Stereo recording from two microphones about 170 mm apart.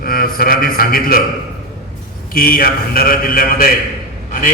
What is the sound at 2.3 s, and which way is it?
A man's voice, 60° left (ahead or behind).